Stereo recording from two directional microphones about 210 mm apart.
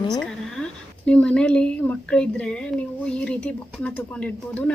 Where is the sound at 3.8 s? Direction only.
5° left (ahead or behind).